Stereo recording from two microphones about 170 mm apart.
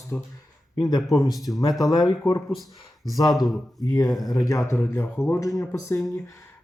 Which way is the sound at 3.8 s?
25° left (ahead or behind).